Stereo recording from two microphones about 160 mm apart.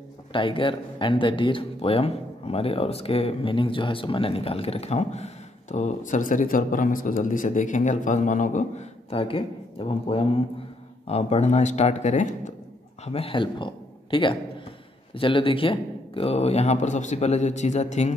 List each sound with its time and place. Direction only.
0.3 s a man's voice: 30° left (ahead or behind); by 12.5 s 50° left (ahead or behind)
13.0 s a man's voice: 40° left (ahead or behind)